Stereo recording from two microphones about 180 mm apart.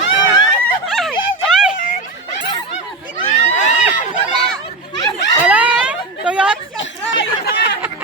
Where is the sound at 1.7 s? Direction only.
50° left (ahead or behind).